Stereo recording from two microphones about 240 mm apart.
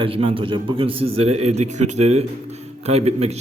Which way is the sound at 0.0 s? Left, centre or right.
Right.